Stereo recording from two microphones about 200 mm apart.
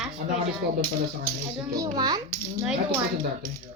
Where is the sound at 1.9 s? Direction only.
20° right (ahead or behind).